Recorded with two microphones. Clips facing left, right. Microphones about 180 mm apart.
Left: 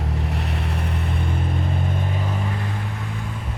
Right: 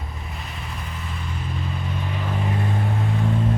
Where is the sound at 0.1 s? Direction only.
70° left (ahead or behind); by 2.2 s 50° left (ahead or behind).